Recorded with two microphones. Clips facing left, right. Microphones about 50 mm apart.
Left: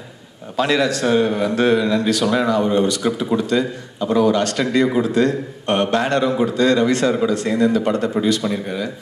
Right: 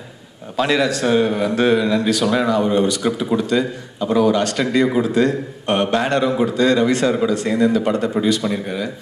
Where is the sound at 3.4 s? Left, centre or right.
Centre.